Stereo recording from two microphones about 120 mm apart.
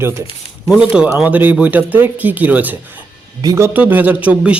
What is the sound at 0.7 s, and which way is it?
Speech, 10° right (ahead or behind).